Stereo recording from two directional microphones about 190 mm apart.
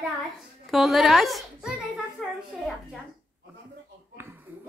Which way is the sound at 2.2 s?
Centre (ahead or behind).